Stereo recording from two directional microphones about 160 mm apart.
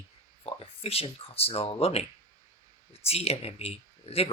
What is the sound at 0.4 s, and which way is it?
Speech, 35° left (ahead or behind).